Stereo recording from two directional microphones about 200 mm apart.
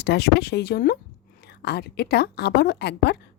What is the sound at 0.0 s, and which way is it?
Speech, 55° left (ahead or behind).